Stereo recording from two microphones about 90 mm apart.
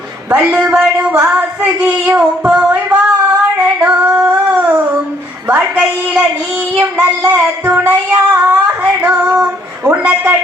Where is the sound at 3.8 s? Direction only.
15° right (ahead or behind).